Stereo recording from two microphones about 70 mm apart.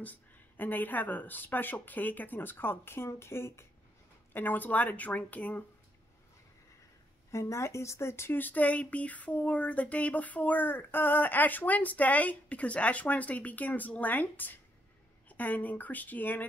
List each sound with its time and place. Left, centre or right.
0.0 s speech: left
7.2 s speech: left
8.4 s speech: left